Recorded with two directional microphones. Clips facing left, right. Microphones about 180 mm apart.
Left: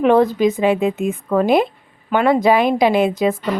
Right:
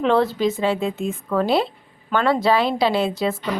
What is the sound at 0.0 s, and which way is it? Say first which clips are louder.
A woman's voice: left 5 dB; 15° left (ahead or behind).